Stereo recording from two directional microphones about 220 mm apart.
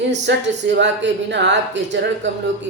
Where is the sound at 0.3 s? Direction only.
55° right (ahead or behind).